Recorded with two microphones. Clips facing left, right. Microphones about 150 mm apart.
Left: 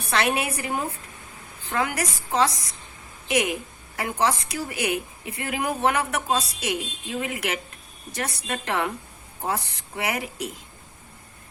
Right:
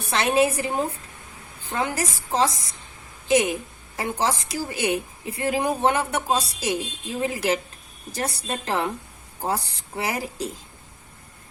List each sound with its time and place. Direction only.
0.1 s a woman's voice: 25° right (ahead or behind)
10.0 s a woman's voice: 30° right (ahead or behind)